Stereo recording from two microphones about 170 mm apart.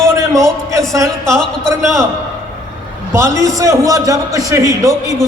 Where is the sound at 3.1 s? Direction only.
15° right (ahead or behind).